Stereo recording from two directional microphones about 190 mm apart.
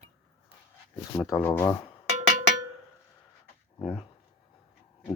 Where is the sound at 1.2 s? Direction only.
5° left (ahead or behind).